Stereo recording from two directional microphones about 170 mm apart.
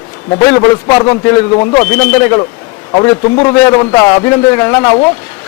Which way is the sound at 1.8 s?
15° left (ahead or behind).